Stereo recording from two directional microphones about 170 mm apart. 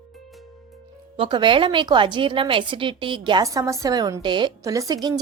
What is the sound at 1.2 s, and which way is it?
A woman's voice, 25° right (ahead or behind).